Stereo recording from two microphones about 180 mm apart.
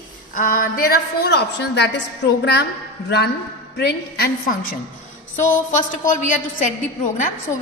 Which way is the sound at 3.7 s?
65° left (ahead or behind).